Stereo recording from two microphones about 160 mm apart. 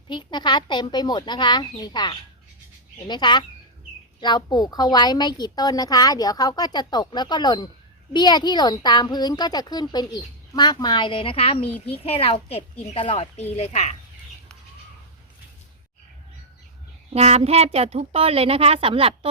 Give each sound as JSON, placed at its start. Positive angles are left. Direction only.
{"t": 0.1, "sound": "speech", "side_deg": 30}
{"t": 17.1, "sound": "speech", "side_deg": -40}